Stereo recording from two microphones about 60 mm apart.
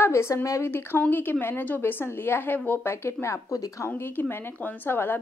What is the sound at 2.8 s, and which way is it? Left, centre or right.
Speech, left.